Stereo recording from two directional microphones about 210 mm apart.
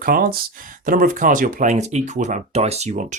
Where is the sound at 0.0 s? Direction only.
45° right (ahead or behind).